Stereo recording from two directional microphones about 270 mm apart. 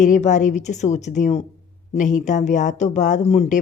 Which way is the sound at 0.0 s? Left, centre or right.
Left.